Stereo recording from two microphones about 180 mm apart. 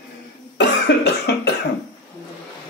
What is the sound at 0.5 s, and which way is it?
Cough, 75° left (ahead or behind).